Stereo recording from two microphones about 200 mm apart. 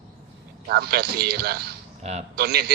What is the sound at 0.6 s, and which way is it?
A man's voice, 50° right (ahead or behind).